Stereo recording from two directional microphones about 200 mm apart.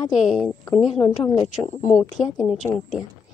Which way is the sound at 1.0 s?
15° left (ahead or behind).